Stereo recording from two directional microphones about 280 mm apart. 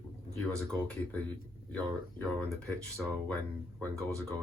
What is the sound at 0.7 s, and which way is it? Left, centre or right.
Speech, centre.